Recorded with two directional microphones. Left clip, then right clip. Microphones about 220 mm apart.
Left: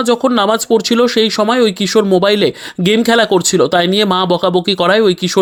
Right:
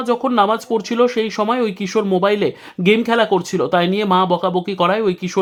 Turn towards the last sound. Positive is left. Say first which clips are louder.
# left 6 dB
turn(degrees=20)  # may be behind; listen again after turning